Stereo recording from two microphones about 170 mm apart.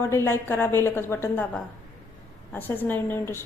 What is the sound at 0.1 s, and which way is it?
Speech, 15° left (ahead or behind).